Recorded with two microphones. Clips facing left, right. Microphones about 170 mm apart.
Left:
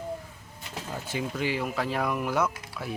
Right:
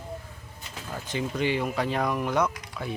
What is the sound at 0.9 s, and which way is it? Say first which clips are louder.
Speech: right 2 dB; 5° left (ahead or behind).